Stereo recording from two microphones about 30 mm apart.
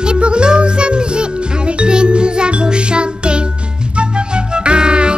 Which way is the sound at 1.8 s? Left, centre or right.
Right.